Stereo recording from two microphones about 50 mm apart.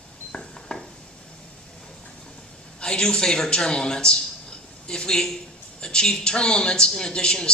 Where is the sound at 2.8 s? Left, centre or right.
Centre.